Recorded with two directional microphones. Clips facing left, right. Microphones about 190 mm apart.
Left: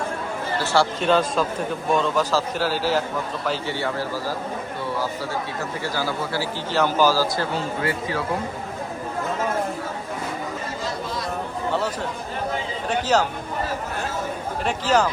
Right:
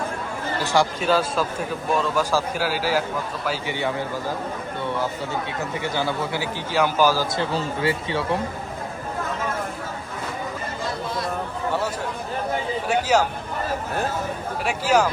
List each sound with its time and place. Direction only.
0.6 s a man's voice: 15° right (ahead or behind)
5.8 s speech: 20° right (ahead or behind)
12.9 s a man's voice: 10° right (ahead or behind)
14.6 s a man's voice: 10° right (ahead or behind)